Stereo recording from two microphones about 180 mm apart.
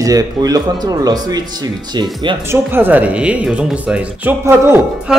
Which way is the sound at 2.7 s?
10° right (ahead or behind).